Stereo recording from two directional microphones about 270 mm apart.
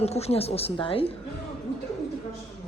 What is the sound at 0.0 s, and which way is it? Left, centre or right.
A woman's voice, left.